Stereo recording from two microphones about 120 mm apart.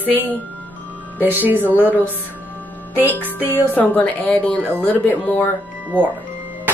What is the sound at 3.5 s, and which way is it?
Speech, 15° left (ahead or behind).